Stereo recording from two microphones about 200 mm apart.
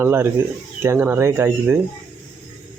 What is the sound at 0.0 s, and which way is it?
Speech, 10° right (ahead or behind).